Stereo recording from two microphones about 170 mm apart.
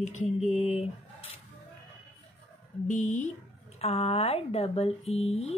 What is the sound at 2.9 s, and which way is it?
Speech, 45° left (ahead or behind).